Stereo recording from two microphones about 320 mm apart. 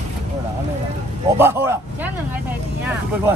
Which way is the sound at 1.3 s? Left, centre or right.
Centre.